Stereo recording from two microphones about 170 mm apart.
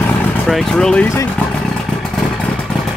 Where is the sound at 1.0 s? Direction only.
15° left (ahead or behind).